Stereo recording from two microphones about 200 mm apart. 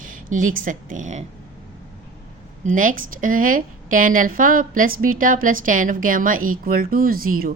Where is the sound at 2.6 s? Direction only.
40° right (ahead or behind).